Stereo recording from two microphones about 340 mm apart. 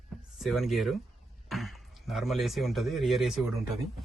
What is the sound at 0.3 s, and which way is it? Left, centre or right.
Speech, centre.